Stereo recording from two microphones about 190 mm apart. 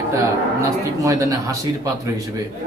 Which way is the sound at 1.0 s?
15° right (ahead or behind).